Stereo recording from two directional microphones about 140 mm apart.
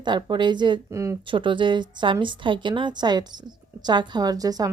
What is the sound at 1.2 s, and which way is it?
A woman's voice, 35° right (ahead or behind).